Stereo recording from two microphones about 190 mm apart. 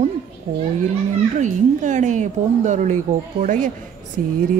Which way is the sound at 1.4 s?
40° right (ahead or behind).